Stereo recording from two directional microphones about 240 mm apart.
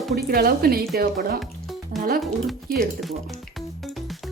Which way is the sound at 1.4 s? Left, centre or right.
Centre.